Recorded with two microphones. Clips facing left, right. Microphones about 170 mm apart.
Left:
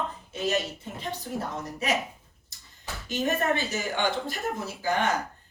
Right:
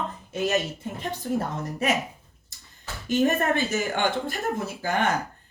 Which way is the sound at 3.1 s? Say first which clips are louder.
Right 4 dB; 50° right (ahead or behind).